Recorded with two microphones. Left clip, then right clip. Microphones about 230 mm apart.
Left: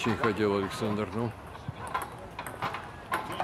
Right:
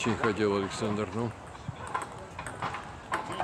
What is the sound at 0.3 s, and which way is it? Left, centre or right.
Speech, centre.